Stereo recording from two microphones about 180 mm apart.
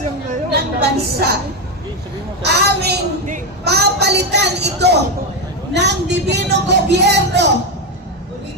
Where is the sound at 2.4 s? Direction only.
65° right (ahead or behind).